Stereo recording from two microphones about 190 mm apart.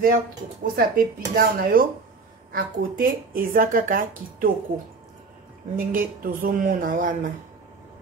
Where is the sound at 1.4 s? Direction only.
50° right (ahead or behind).